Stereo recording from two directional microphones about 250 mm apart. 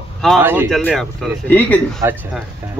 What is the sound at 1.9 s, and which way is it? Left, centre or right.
Speech, centre.